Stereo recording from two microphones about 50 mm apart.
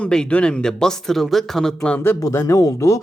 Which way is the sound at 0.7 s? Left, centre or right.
Centre.